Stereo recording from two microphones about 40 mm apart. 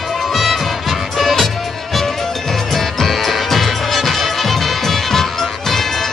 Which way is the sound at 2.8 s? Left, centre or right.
Centre.